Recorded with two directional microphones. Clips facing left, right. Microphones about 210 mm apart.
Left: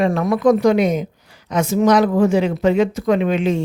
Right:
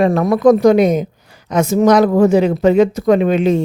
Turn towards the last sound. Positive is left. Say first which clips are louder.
# right 5 dB
turn(degrees=-40)  # may be behind; listen again after turning